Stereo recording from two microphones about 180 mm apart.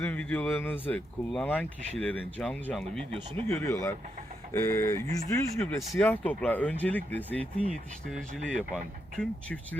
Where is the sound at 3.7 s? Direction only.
15° left (ahead or behind).